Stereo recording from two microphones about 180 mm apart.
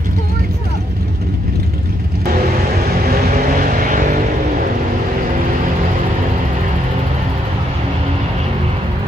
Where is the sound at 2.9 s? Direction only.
60° right (ahead or behind).